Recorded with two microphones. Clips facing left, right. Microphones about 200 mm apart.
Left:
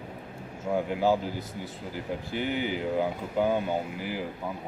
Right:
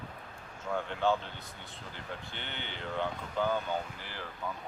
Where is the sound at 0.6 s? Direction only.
10° left (ahead or behind).